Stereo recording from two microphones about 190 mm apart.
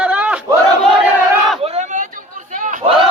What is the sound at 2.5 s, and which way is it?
Crowd, 40° right (ahead or behind).